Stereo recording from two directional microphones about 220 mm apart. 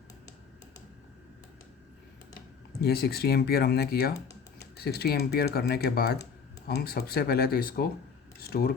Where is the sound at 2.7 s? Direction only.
45° left (ahead or behind).